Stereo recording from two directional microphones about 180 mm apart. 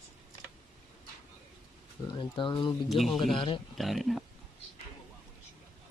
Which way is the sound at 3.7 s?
Centre (ahead or behind).